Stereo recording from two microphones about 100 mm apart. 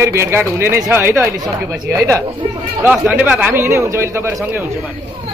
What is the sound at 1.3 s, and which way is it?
Speech, 35° right (ahead or behind).